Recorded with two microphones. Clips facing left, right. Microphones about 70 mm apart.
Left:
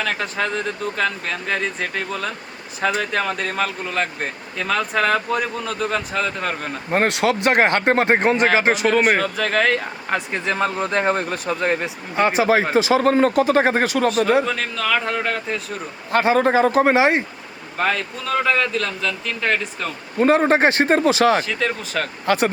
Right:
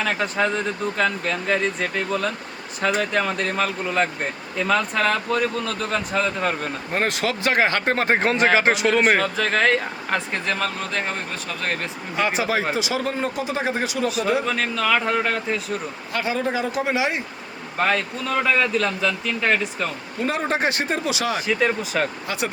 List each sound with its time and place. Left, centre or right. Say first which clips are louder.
0.0 s speech: right 1 dB; centre
6.9 s speech: left 5 dB; left
7.3 s speech: left 4 dB; left
8.0 s speech: left 3 dB; centre
8.6 s speech: left 1 dB; centre
10.2 s speech: left 4 dB; centre; by 11.5 s left
11.6 s speech: left 3 dB; centre
12.2 s speech: left 5 dB; left
14.4 s speech: right 1 dB; centre
16.1 s speech: left 8 dB; left
17.7 s speech: even; centre
20.1 s speech: left 9 dB; left
21.4 s speech: right 2 dB; centre